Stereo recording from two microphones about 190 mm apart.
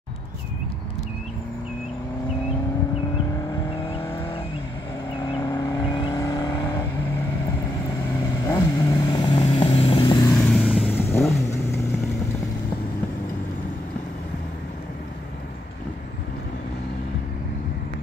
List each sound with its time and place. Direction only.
3.8 s vehicle: 30° left (ahead or behind)
5.3 s vehicle: 15° left (ahead or behind)
8.5 s vehicle: 20° left (ahead or behind)
10.2 s vehicle: 5° left (ahead or behind)
10.9 s vehicle: 10° left (ahead or behind)